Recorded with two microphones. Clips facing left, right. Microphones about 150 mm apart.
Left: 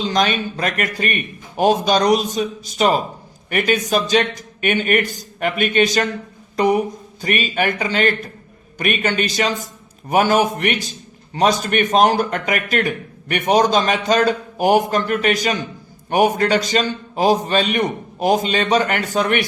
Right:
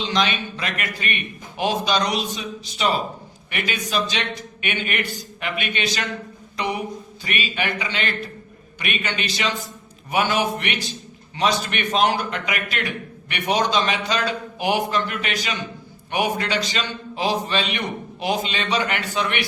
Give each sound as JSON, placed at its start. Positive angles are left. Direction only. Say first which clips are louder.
{"t": 0.0, "sound": "a man's voice", "louder": "left 4 dB", "side_deg": 45}